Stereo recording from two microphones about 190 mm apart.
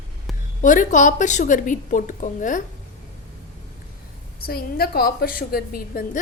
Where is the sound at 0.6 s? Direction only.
40° left (ahead or behind).